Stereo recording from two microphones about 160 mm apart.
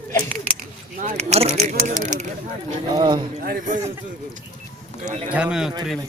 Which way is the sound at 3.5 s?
55° right (ahead or behind).